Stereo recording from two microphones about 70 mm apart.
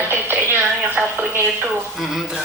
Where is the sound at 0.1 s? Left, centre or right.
Right.